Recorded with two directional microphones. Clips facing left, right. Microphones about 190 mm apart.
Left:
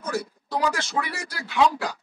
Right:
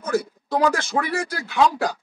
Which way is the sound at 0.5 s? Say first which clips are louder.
Right 6 dB; 50° right (ahead or behind).